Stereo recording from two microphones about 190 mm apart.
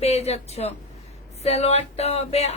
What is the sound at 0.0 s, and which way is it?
Speech, 35° left (ahead or behind).